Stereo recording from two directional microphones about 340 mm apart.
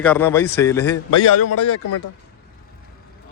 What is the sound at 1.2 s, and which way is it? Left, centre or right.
Speech, left.